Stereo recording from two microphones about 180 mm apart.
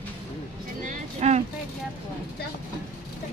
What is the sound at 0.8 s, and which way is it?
Vehicle, 40° right (ahead or behind).